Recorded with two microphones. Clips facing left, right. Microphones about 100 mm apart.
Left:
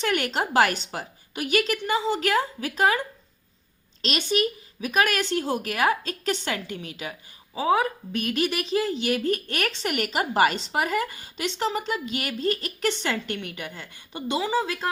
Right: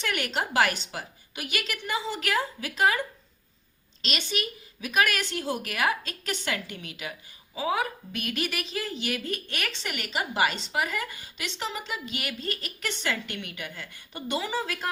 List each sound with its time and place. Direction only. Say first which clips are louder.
0.0 s a woman's voice: left 4 dB; 35° left (ahead or behind)
4.0 s a woman's voice: left 7 dB; 40° left (ahead or behind); by 14.8 s 20° left (ahead or behind)